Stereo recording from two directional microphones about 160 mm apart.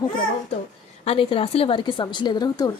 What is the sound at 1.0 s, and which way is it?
A woman's voice, 35° left (ahead or behind).